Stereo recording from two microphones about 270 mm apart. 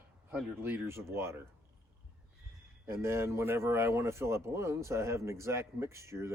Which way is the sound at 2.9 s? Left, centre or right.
Centre.